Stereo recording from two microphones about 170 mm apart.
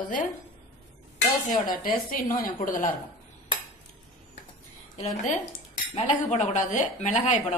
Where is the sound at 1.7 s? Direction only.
55° left (ahead or behind).